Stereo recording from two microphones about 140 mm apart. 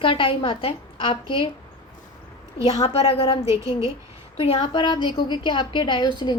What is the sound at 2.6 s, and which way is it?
A woman's voice, 45° left (ahead or behind).